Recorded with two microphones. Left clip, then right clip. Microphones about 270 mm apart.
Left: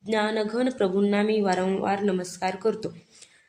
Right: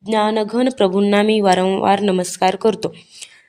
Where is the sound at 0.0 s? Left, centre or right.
Right.